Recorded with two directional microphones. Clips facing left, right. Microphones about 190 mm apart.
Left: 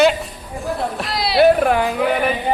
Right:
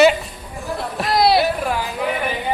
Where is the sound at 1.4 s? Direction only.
60° left (ahead or behind).